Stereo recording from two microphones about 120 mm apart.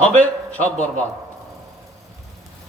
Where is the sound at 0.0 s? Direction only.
10° left (ahead or behind).